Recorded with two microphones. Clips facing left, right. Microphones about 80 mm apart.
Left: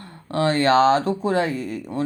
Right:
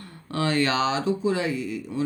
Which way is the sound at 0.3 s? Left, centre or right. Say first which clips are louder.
Left 5 dB; left.